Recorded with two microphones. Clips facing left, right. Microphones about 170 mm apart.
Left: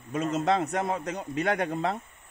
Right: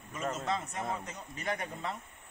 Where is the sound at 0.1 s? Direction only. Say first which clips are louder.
Left 9 dB; 70° left (ahead or behind).